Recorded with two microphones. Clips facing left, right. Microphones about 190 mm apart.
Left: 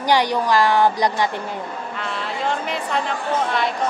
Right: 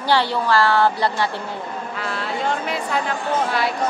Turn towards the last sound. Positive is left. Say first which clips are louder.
# even
turn(degrees=-5)  # may be behind; listen again after turning